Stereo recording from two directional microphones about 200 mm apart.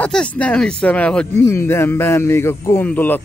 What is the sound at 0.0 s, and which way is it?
A man's voice, 5° left (ahead or behind).